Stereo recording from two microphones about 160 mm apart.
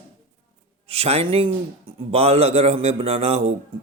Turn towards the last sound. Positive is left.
turn(degrees=-40)  # may be behind; listen again after turning